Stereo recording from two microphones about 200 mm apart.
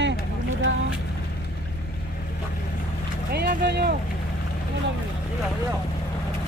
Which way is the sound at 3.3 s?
55° right (ahead or behind).